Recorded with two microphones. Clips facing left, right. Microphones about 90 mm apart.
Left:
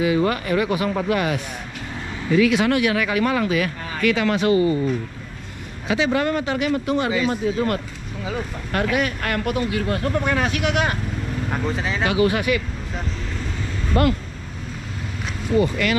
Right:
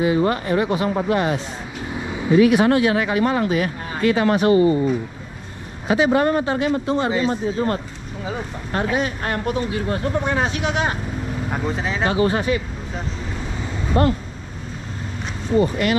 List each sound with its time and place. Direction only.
0.0 s speech: 30° right (ahead or behind)
2.0 s vehicle: 15° right (ahead or behind)
2.3 s speech: 25° right (ahead or behind)
5.9 s speech: 25° right (ahead or behind)
8.9 s speech: 70° left (ahead or behind)
9.8 s speech: 15° right (ahead or behind)
10.4 s speech: 65° left (ahead or behind)
11.4 s speech: 5° right (ahead or behind)
12.1 s speech: 90° left
13.6 s vehicle: 15° right (ahead or behind)